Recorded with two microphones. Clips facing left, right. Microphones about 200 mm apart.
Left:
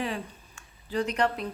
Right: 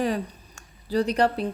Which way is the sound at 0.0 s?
40° right (ahead or behind).